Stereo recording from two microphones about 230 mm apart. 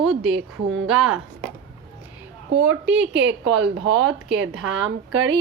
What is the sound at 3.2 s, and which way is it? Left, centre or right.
A woman's voice, right.